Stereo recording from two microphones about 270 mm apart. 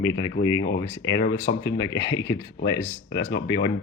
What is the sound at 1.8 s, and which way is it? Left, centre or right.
Speech, centre.